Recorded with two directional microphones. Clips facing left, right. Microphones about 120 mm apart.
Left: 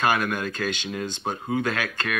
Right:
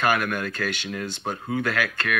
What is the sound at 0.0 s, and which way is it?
Speech, 20° left (ahead or behind).